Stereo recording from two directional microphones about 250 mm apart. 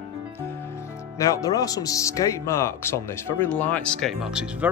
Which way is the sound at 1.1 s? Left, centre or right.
Centre.